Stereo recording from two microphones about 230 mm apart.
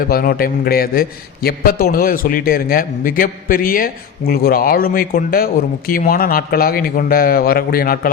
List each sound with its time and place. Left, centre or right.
0.0 s a man's voice: left